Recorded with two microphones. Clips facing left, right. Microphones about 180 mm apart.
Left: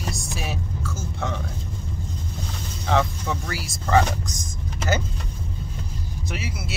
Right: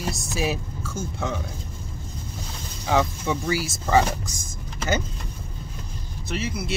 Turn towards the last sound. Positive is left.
turn(degrees=5)  # may be behind; listen again after turning